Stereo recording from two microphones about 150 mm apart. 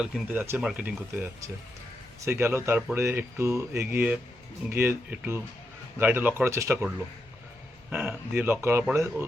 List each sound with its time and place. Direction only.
0.0 s speech: centre (ahead or behind); by 6.8 s 20° right (ahead or behind)
7.9 s speech: 15° right (ahead or behind)